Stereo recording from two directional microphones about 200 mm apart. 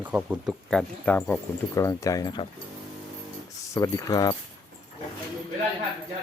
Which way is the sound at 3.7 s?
15° left (ahead or behind).